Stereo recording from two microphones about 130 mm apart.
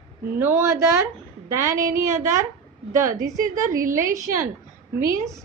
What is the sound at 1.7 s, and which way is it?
Speech, 90° right.